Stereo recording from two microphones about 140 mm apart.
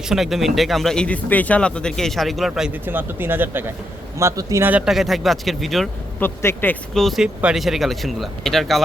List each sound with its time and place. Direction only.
0.1 s speech: centre (ahead or behind)
2.8 s a man's voice: 15° right (ahead or behind)
4.7 s speech: centre (ahead or behind)
6.1 s a man's voice: 15° left (ahead or behind)
6.9 s speech: centre (ahead or behind)